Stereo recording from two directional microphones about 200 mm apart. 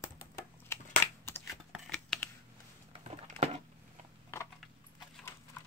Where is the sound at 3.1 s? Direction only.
30° right (ahead or behind).